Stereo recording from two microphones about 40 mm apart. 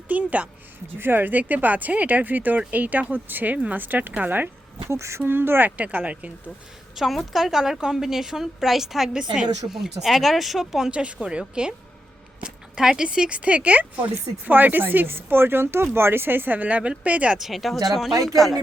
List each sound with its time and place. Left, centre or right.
0.1 s a woman's voice: right
0.9 s speech: right
5.2 s speech: right
5.7 s a woman's voice: right
6.9 s speech: centre
7.6 s a woman's voice: centre
10.9 s a woman's voice: right
12.8 s a woman's voice: centre
13.3 s speech: right
15.1 s a woman's voice: right
16.6 s a woman's voice: right
17.3 s speech: centre